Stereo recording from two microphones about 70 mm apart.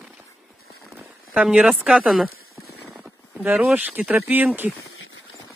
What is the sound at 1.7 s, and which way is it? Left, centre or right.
Speech, centre.